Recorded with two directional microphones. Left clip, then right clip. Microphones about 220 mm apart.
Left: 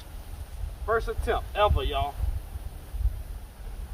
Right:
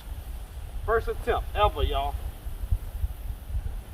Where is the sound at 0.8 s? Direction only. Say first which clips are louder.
Right 1 dB; 15° left (ahead or behind).